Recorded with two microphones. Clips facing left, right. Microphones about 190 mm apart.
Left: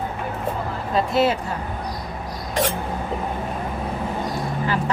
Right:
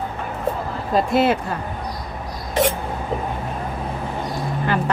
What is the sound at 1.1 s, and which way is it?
Speech, 55° right (ahead or behind).